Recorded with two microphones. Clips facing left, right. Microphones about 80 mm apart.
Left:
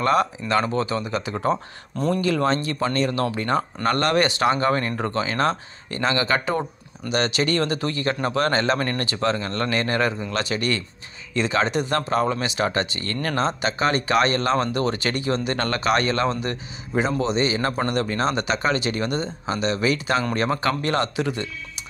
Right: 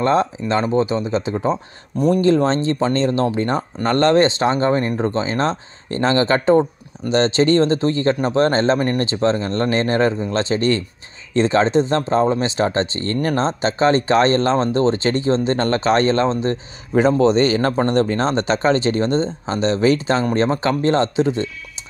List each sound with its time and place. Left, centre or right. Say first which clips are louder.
0.0 s speech: right 3 dB; right
2.2 s speech: right 6 dB; right
16.9 s speech: right 8 dB; right